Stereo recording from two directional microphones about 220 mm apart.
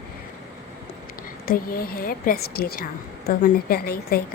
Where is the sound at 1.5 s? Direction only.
40° left (ahead or behind).